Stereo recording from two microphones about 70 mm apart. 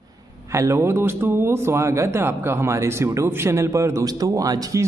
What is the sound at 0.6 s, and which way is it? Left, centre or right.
Speech, right.